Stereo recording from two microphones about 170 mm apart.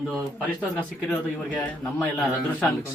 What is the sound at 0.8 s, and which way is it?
A man's voice, 5° left (ahead or behind).